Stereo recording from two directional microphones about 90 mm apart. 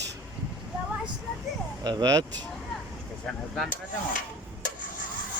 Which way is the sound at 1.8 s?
50° right (ahead or behind).